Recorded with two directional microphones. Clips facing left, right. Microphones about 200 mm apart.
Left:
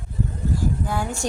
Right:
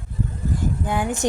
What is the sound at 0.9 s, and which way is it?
Speech, 20° right (ahead or behind).